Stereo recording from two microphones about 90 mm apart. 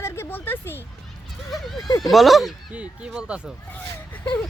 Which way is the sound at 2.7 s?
15° right (ahead or behind).